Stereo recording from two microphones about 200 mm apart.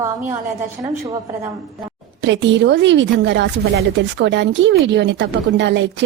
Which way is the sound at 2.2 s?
65° right (ahead or behind).